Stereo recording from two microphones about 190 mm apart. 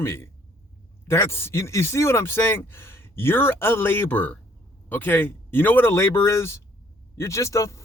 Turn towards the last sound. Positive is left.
turn(degrees=15)  # may be behind; listen again after turning